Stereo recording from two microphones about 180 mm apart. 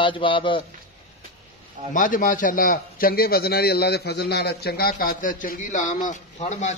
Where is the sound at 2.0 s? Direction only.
50° left (ahead or behind).